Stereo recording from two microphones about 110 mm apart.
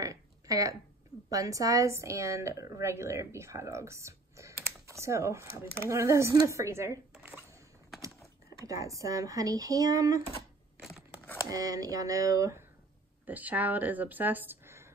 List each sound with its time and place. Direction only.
0.0 s a sound: 30° right (ahead or behind)
1.3 s a woman's voice: 30° right (ahead or behind)
8.6 s speech: 30° right (ahead or behind)
10.8 s a sound: 5° right (ahead or behind)
11.5 s speech: 30° right (ahead or behind)
13.3 s speech: 15° right (ahead or behind)